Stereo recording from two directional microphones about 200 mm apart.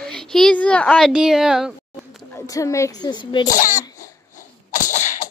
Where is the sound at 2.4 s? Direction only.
15° left (ahead or behind).